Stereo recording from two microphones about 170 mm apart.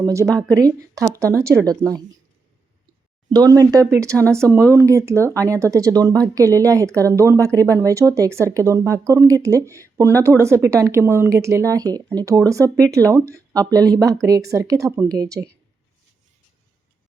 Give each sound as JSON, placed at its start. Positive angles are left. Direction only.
{"t": 0.0, "sound": "speech", "side_deg": -20}
{"t": 3.2, "sound": "speech", "side_deg": -20}